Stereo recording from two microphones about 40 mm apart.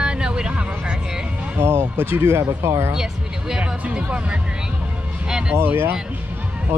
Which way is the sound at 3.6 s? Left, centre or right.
Right.